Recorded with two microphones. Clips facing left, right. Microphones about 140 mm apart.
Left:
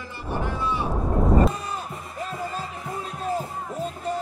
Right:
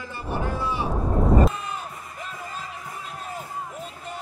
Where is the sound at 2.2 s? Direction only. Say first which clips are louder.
Left 6 dB; 35° left (ahead or behind).